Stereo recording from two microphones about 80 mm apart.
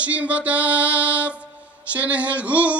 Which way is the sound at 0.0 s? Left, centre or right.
Centre.